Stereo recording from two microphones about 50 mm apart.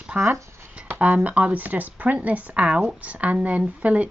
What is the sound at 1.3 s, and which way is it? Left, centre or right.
Speech, right.